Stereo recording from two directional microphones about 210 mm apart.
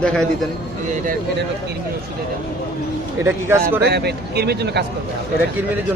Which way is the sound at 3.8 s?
50° right (ahead or behind).